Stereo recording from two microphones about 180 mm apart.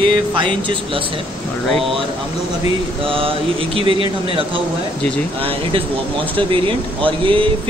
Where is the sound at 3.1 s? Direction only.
30° right (ahead or behind).